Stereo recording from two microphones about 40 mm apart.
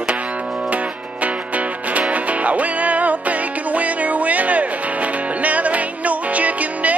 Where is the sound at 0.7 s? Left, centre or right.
Right.